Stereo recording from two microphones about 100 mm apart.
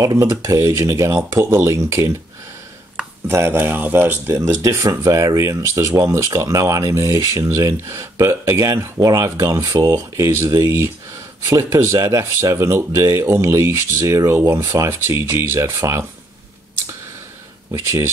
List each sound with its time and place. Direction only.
0.0 s speech: 35° right (ahead or behind)
3.3 s speech: 25° right (ahead or behind)
4.3 s speech: 30° right (ahead or behind)
17.6 s speech: 30° right (ahead or behind)